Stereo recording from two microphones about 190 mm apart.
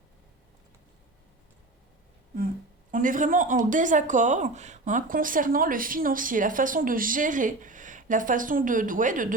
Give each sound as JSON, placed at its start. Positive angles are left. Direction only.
{"t": 2.9, "sound": "a woman's voice", "side_deg": -45}